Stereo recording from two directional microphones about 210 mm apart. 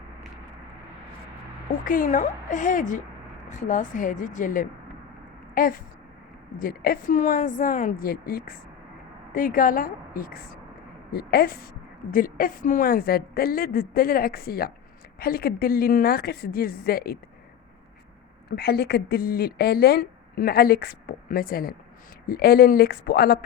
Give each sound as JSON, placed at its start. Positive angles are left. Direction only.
{"t": 1.8, "sound": "a woman's voice", "side_deg": 40}
{"t": 18.4, "sound": "speech", "side_deg": 50}